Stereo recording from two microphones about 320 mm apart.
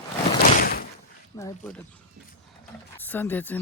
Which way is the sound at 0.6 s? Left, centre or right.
Left.